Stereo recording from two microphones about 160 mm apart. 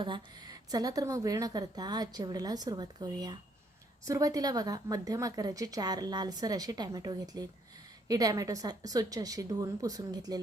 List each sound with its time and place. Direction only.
0.0 s a woman's voice: 25° right (ahead or behind)